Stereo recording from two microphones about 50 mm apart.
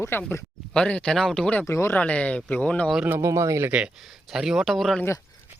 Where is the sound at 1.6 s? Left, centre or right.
Left.